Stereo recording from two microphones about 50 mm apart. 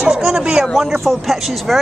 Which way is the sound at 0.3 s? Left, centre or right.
Centre.